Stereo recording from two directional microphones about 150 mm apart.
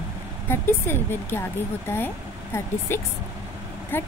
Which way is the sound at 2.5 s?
15° left (ahead or behind).